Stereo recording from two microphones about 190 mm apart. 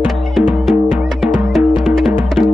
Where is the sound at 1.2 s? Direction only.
Centre (ahead or behind).